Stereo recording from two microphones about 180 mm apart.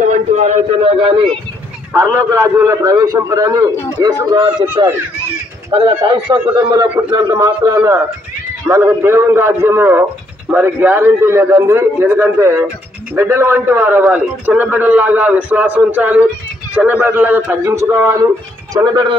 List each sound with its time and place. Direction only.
0.0 s speech: 40° right (ahead or behind)
2.0 s a man's voice: 15° right (ahead or behind)